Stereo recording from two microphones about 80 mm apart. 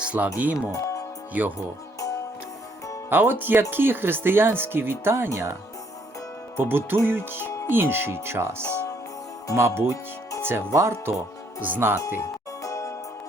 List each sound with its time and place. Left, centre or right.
0.0 s music: centre
0.7 s music: left
1.3 s speech: right
3.1 s speech: right
6.6 s speech: right
12.2 s music: left